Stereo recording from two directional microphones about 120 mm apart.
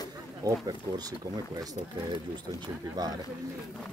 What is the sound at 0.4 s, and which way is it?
Speech, 30° right (ahead or behind).